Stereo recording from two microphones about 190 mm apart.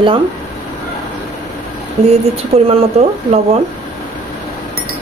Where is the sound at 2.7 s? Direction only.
35° right (ahead or behind).